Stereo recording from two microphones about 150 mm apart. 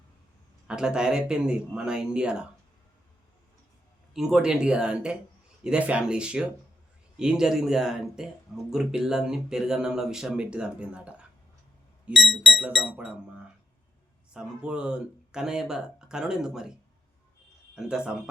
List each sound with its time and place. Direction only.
0.7 s speech: 5° right (ahead or behind)
4.1 s speech: 5° right (ahead or behind)
17.7 s speech: 5° right (ahead or behind)